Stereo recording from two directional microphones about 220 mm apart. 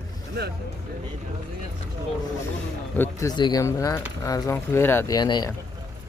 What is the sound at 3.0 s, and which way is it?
Speech, 15° left (ahead or behind).